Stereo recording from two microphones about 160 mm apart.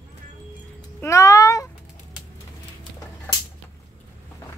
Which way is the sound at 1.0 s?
20° left (ahead or behind).